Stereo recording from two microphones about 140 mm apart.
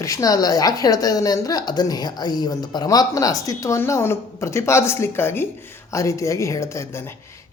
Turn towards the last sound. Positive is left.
turn(degrees=20)  # may be behind; listen again after turning